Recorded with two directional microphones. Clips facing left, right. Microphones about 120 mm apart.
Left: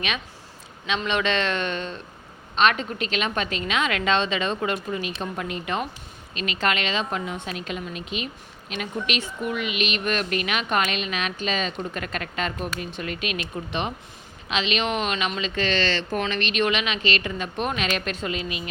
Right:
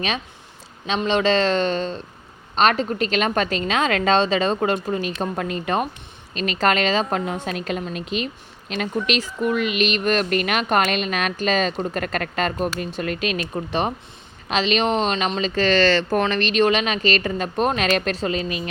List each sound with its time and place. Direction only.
0.9 s a woman's voice: 30° right (ahead or behind)